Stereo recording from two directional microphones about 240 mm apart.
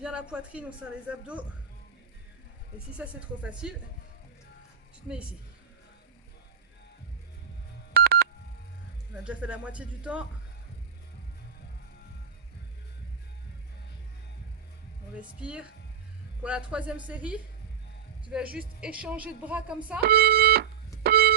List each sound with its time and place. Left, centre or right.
0.0 s speech: centre
3.0 s speech: centre
7.9 s telephone dialing: right
9.2 s speech: centre
15.4 s speech: centre
20.0 s speech: right
21.0 s a sound: right